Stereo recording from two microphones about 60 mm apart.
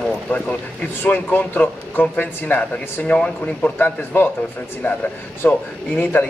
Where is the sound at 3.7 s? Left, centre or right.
Left.